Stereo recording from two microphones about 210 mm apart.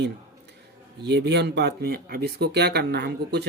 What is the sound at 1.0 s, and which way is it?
Speech, 55° right (ahead or behind).